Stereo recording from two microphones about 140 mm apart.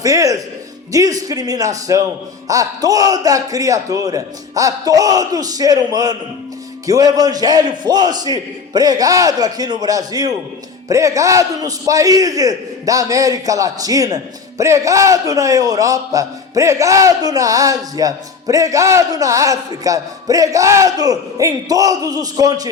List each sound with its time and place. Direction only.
0.0 s music: 25° right (ahead or behind)
0.9 s a man's voice: 25° right (ahead or behind)